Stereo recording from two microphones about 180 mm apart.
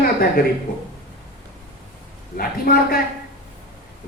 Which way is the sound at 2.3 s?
55° left (ahead or behind).